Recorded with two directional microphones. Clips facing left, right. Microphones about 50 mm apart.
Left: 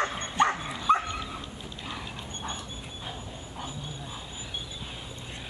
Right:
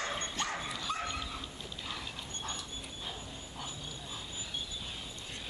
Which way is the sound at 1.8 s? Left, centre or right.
Centre.